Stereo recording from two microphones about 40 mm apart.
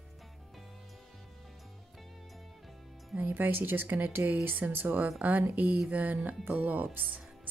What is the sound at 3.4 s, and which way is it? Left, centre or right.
Speech, right.